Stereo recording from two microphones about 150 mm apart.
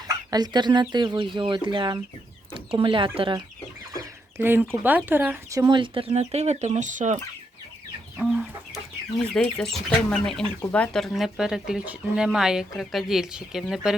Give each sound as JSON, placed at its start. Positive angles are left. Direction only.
{"t": 0.3, "sound": "speech", "side_deg": -25}
{"t": 4.4, "sound": "speech", "side_deg": -15}
{"t": 5.5, "sound": "speech", "side_deg": -30}
{"t": 8.2, "sound": "speech", "side_deg": -5}